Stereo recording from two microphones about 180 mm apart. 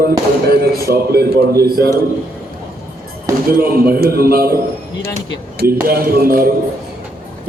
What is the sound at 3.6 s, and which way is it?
A man's voice, 55° right (ahead or behind).